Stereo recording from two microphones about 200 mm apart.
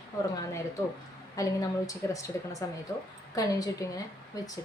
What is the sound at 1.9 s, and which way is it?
A woman's voice, 15° left (ahead or behind).